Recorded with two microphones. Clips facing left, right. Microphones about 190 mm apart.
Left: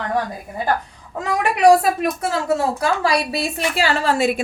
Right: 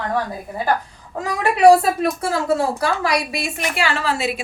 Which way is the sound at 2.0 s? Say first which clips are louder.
Right 1 dB; 20° left (ahead or behind).